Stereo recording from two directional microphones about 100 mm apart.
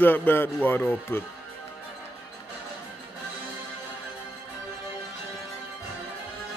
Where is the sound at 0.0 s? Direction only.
20° left (ahead or behind).